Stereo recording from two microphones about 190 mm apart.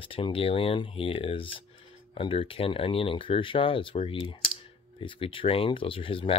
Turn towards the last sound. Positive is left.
turn(degrees=30)  # may be behind; listen again after turning